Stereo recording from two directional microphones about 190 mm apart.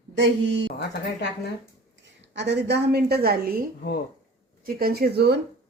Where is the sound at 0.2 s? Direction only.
75° right (ahead or behind).